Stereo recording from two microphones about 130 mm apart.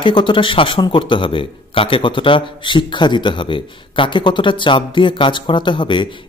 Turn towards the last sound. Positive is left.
turn(degrees=40)  # may be behind; listen again after turning